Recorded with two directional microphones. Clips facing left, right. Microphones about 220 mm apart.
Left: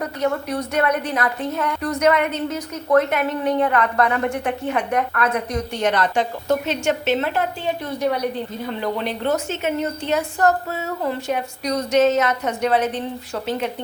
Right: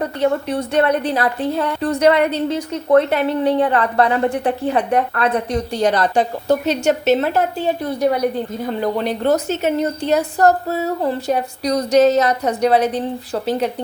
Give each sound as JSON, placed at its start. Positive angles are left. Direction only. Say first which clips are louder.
{"t": 0.0, "sound": "a woman's voice", "louder": "right 4 dB", "side_deg": -30}